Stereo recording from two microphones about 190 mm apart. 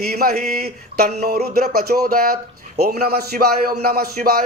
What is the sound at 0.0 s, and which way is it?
Speech, 55° right (ahead or behind).